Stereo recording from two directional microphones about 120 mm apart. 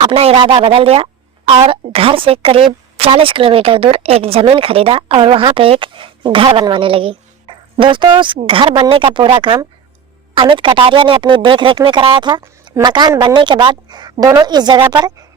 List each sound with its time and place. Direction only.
0.0 s a woman's voice: 55° right (ahead or behind); by 14.8 s 35° right (ahead or behind)